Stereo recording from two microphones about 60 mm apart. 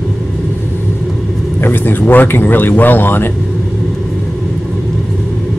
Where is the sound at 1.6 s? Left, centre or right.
Left.